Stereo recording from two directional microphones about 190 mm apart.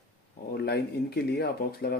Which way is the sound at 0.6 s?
60° left (ahead or behind).